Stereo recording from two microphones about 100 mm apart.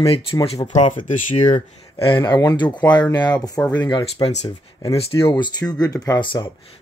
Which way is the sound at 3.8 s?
45° left (ahead or behind).